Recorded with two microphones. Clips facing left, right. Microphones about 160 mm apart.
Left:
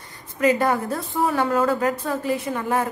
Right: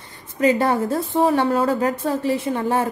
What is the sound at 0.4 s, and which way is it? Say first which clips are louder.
A woman's voice: right 2 dB; 30° right (ahead or behind).